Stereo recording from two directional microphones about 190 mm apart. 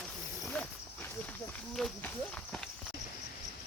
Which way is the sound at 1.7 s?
5° left (ahead or behind).